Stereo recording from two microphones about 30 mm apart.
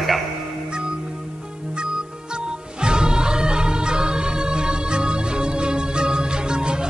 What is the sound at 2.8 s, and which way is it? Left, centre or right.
Music, right.